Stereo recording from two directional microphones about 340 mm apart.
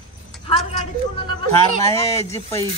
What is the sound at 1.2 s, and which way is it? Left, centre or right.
Speech, centre.